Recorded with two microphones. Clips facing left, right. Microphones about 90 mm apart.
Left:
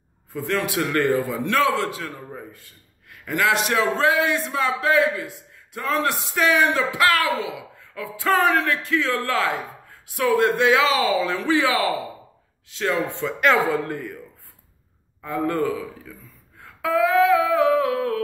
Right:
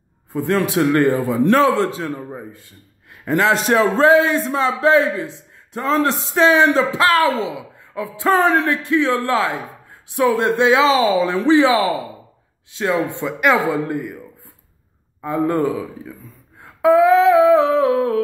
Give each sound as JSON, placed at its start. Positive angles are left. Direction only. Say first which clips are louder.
{"t": 0.3, "sound": "a man's voice", "louder": "right 6 dB", "side_deg": -25}
{"t": 1.4, "sound": "a man's voice", "louder": "right 6 dB", "side_deg": -35}
{"t": 15.2, "sound": "a man's voice", "louder": "right 5 dB", "side_deg": -20}
{"t": 16.6, "sound": "humming", "louder": "right 8 dB", "side_deg": -20}